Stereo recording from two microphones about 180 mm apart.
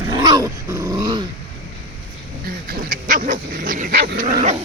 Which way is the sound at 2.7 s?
50° right (ahead or behind).